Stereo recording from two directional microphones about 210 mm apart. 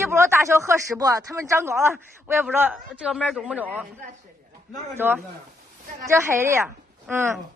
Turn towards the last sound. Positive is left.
turn(degrees=-10)  # may be behind; listen again after turning